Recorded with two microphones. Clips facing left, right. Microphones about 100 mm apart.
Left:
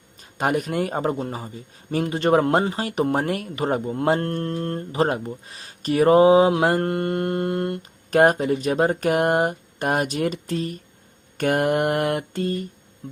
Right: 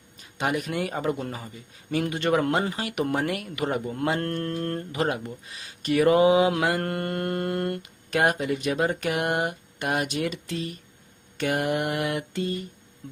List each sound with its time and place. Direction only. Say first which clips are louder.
0.2 s speech: left 4 dB; 45° left (ahead or behind); by 7.8 s 25° left (ahead or behind)
7.8 s speech: left 7 dB; 40° left (ahead or behind)
11.3 s mantra: left 5 dB; 50° left (ahead or behind)